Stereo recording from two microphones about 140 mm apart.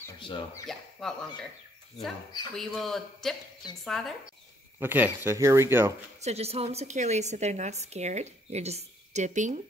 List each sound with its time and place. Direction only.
0.7 s speech: 5° left (ahead or behind)
2.5 s a man's voice: 5° left (ahead or behind)
4.7 s speech: 15° right (ahead or behind)
6.2 s a woman's voice: 50° right (ahead or behind)